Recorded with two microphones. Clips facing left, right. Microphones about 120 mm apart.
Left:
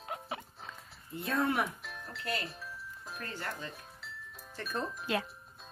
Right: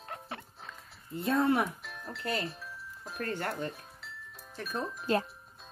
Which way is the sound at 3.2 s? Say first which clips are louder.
Right 7 dB; 60° right (ahead or behind).